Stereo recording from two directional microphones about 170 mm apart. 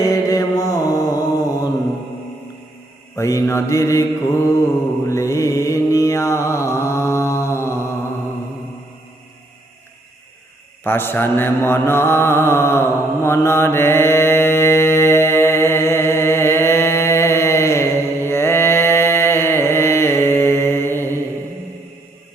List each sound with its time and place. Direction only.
0.0 s mantra: 20° left (ahead or behind)
3.2 s mantra: 20° left (ahead or behind)
10.8 s mantra: 15° left (ahead or behind)